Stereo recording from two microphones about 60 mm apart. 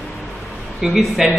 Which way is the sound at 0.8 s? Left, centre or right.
Centre.